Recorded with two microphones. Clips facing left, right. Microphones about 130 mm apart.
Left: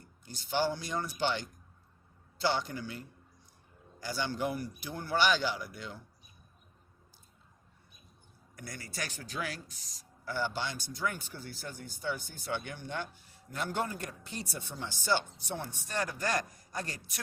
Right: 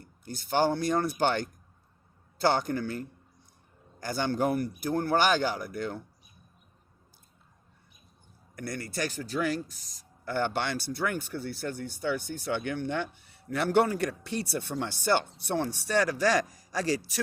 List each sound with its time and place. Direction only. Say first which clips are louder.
0.0 s speech: right 8 dB; 55° right (ahead or behind)
4.0 s speech: right 6 dB; 50° right (ahead or behind)
8.5 s speech: right 8 dB; 60° right (ahead or behind)
9.6 s speech: right 2 dB; centre (ahead or behind)
10.2 s speech: right 6 dB; 60° right (ahead or behind); by 17.2 s 90° right